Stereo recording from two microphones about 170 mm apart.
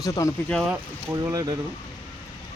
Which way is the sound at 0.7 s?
15° right (ahead or behind).